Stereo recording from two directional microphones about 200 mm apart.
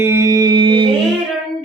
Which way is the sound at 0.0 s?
15° right (ahead or behind).